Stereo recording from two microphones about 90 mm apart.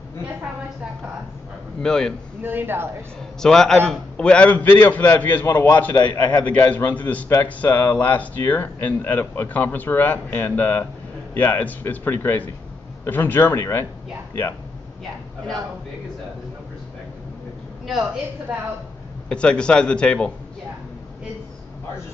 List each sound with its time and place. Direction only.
1.8 s a man's voice: 5° left (ahead or behind)
2.4 s a woman's voice: 25° right (ahead or behind)
3.4 s a man's voice: 5° left (ahead or behind)
5.9 s a man's voice: 50° left (ahead or behind)
6.4 s a man's voice: 15° left (ahead or behind)
19.2 s a man's voice: 10° left (ahead or behind)